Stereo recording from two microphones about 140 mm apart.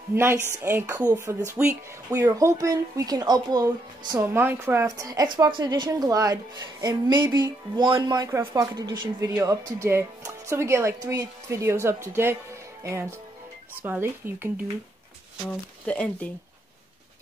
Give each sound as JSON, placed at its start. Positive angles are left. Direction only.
{"t": 0.1, "sound": "a woman's voice", "side_deg": -15}
{"t": 4.2, "sound": "a woman's voice", "side_deg": -15}
{"t": 15.8, "sound": "speech", "side_deg": 10}